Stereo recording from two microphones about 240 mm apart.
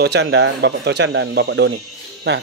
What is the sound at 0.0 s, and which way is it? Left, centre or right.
Speech, right.